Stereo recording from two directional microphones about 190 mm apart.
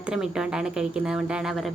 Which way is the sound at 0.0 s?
5° right (ahead or behind).